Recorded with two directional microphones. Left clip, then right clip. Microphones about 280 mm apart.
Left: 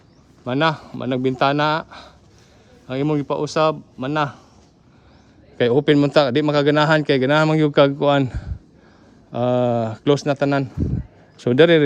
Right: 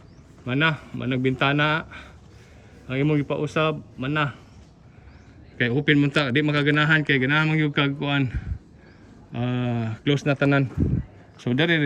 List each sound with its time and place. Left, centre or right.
0.4 s speech: centre
5.5 s speech: centre
11.3 s speech: left